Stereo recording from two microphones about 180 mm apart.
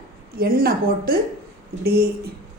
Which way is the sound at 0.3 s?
55° right (ahead or behind).